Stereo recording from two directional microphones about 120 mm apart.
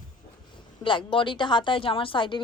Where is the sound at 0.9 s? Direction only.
40° left (ahead or behind).